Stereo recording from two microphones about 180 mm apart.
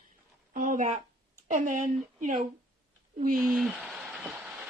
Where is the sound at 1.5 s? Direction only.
45° right (ahead or behind).